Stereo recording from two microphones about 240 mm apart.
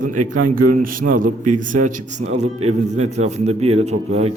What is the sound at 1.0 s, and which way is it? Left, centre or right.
A man's voice, right.